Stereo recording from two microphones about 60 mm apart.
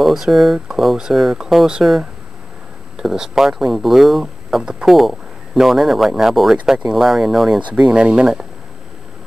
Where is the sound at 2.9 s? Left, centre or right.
Centre.